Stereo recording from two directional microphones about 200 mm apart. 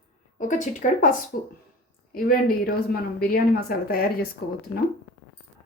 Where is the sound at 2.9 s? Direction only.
50° left (ahead or behind).